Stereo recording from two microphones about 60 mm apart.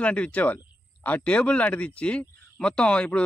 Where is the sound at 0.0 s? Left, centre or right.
Left.